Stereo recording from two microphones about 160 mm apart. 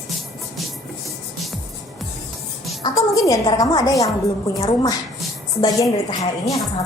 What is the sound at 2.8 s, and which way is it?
Music, 20° left (ahead or behind).